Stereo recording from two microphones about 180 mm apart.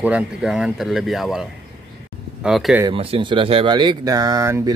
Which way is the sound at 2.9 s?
30° right (ahead or behind).